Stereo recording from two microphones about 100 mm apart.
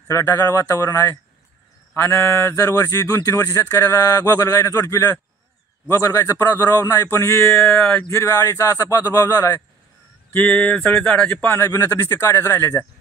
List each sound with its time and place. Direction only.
0.1 s speech: 30° left (ahead or behind)
7.8 s speech: 15° left (ahead or behind)
8.1 s speech: 35° left (ahead or behind)
10.3 s speech: 15° left (ahead or behind)
11.6 s speech: 35° left (ahead or behind)